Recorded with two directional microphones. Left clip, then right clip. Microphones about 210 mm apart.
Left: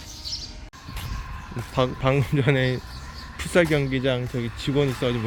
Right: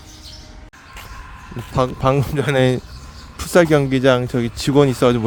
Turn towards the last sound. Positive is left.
turn(degrees=-35)  # may be behind; listen again after turning